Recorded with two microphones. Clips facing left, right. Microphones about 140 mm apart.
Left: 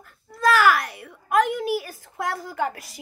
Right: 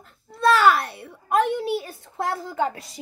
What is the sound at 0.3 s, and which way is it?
A child's voice, 30° right (ahead or behind).